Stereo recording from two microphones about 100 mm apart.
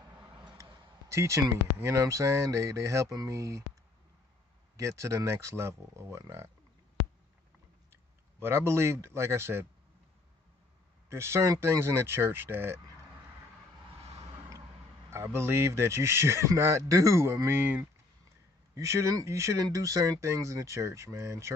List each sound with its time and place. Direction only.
0.6 s speech: 30° right (ahead or behind)
4.7 s a man's voice: 30° right (ahead or behind)
8.4 s a man's voice: 25° right (ahead or behind)
11.1 s a man's voice: 25° right (ahead or behind)
14.0 s a sound: 90° right
15.0 s a man's voice: 25° right (ahead or behind)